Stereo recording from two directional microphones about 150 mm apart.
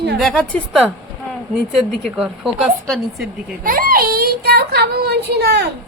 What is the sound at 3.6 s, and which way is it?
Speech, 70° right (ahead or behind).